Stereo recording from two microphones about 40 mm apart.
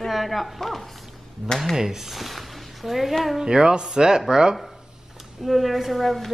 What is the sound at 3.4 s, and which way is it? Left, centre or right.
Speech, centre.